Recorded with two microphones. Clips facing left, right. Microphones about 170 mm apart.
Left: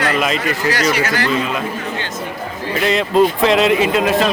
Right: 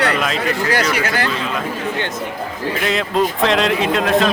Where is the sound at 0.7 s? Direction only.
55° right (ahead or behind).